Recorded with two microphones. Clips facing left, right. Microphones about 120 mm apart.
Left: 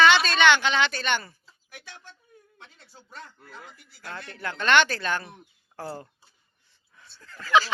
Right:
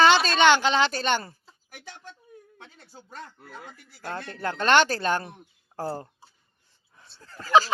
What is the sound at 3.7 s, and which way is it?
A woman's voice, 40° right (ahead or behind).